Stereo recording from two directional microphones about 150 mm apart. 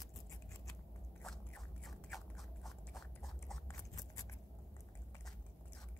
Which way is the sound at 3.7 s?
25° left (ahead or behind).